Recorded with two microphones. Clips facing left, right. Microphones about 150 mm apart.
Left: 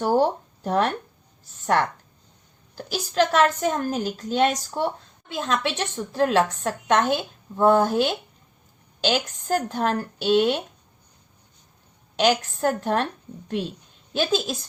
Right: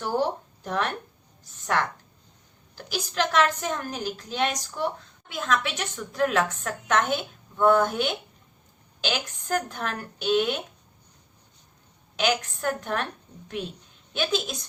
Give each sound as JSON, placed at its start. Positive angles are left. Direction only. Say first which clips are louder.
{"t": 0.0, "sound": "a woman's voice", "louder": "left 6 dB", "side_deg": 40}
{"t": 12.2, "sound": "a woman's voice", "louder": "left 5 dB", "side_deg": 40}
{"t": 14.1, "sound": "a woman's voice", "louder": "left 4 dB", "side_deg": 35}